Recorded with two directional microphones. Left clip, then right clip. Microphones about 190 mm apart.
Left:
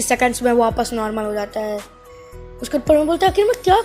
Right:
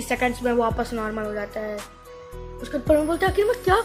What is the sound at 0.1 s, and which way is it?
Speech, 35° left (ahead or behind).